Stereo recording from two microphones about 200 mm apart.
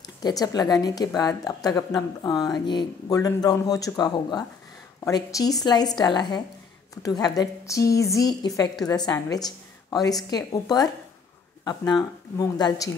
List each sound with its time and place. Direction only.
0.0 s a woman's voice: 20° left (ahead or behind)